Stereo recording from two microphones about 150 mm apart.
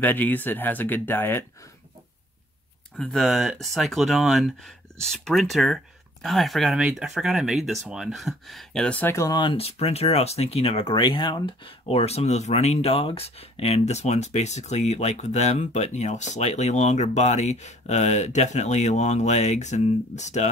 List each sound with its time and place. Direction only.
0.0 s speech: 10° left (ahead or behind)
3.0 s speech: centre (ahead or behind); by 9.4 s 20° left (ahead or behind)
9.4 s speech: 35° left (ahead or behind)